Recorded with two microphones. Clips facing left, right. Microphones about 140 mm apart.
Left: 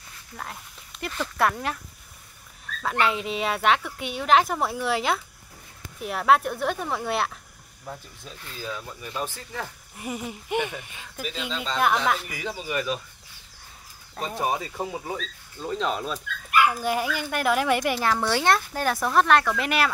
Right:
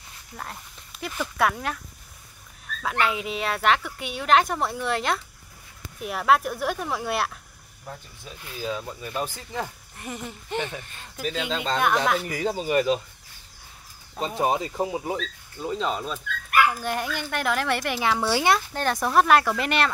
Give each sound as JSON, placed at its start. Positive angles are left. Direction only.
{"t": 0.4, "sound": "speech", "side_deg": 0}
{"t": 2.8, "sound": "speech", "side_deg": 0}
{"t": 8.3, "sound": "speech", "side_deg": -15}
{"t": 9.9, "sound": "speech", "side_deg": 5}
{"t": 11.3, "sound": "speech", "side_deg": -55}
{"t": 11.8, "sound": "speech", "side_deg": 0}
{"t": 12.4, "sound": "speech", "side_deg": -35}
{"t": 14.4, "sound": "speech", "side_deg": -25}
{"t": 15.6, "sound": "speech", "side_deg": -5}
{"t": 18.7, "sound": "speech", "side_deg": 5}